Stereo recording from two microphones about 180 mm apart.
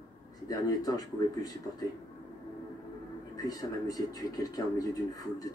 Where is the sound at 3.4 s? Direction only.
20° left (ahead or behind).